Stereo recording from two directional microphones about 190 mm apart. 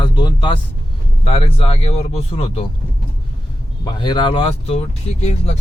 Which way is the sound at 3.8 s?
25° left (ahead or behind).